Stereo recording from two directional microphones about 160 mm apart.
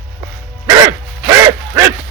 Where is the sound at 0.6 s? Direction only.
20° right (ahead or behind).